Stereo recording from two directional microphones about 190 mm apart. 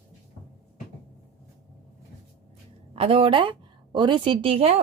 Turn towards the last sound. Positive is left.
turn(degrees=-30)  # may be behind; listen again after turning